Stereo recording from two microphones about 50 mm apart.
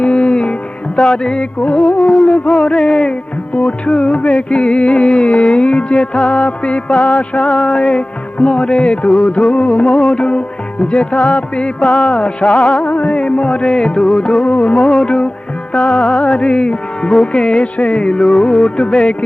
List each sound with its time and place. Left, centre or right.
0.0 s music: left
12.8 s music: left
14.8 s music: centre